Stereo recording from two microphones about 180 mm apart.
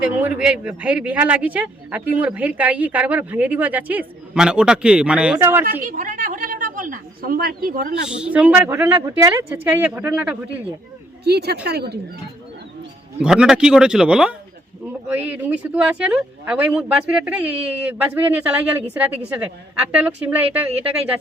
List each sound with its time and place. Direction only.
0.0 s speech: 10° right (ahead or behind)
5.8 s a sound: 45° right (ahead or behind)
8.0 s speech: 5° right (ahead or behind)
11.2 s speech: 65° right (ahead or behind)
13.2 s speech: 5° right (ahead or behind)
19.9 s speech: 10° right (ahead or behind)